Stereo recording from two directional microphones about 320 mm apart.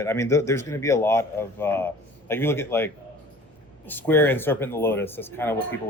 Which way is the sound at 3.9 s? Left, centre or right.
Centre.